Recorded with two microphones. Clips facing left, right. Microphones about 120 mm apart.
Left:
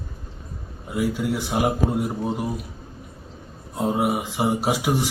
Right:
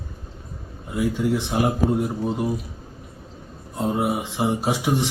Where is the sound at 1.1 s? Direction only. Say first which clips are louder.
Right 2 dB; 5° left (ahead or behind).